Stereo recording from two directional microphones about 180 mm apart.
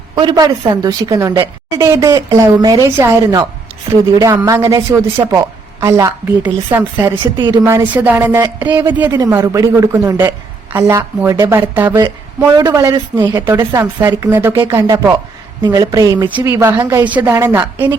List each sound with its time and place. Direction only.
0.2 s a woman's voice: 25° right (ahead or behind)
17.1 s a woman's voice: 10° right (ahead or behind)